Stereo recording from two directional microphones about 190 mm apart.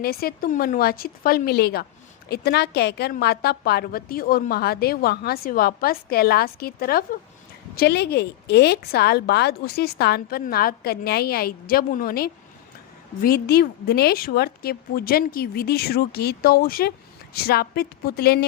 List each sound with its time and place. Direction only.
0.0 s a woman's voice: 55° left (ahead or behind)